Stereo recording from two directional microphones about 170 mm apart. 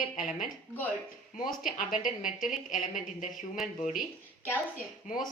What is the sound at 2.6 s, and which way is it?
Speech, 50° left (ahead or behind).